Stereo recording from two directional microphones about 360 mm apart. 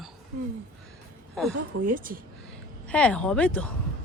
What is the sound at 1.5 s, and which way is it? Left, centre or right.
Speech, right.